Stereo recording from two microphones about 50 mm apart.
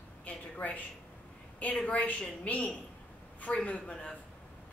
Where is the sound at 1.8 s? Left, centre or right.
Left.